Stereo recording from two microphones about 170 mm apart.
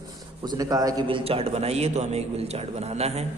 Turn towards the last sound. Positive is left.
turn(degrees=-40)  # may be behind; listen again after turning